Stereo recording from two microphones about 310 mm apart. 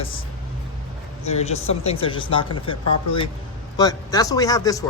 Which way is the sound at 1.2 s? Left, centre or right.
Left.